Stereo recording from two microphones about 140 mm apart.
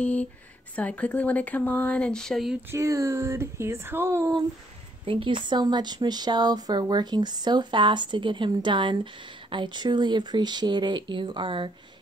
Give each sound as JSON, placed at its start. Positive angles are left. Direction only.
{"t": 0.0, "sound": "speech", "side_deg": 10}
{"t": 2.7, "sound": "speech", "side_deg": -20}
{"t": 5.0, "sound": "speech", "side_deg": -40}